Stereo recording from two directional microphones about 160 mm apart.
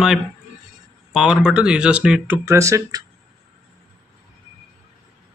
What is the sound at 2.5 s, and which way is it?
Speech, 20° right (ahead or behind).